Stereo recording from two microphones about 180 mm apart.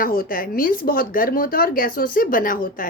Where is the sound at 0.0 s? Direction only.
50° left (ahead or behind).